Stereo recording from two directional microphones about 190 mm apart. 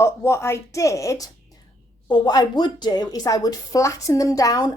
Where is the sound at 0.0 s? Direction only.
15° left (ahead or behind).